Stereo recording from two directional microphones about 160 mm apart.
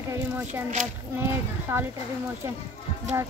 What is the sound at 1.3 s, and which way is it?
Speech, 15° right (ahead or behind).